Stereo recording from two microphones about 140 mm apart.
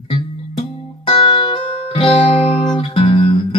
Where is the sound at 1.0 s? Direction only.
40° left (ahead or behind).